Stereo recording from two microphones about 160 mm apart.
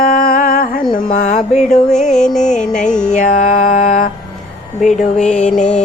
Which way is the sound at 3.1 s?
50° left (ahead or behind).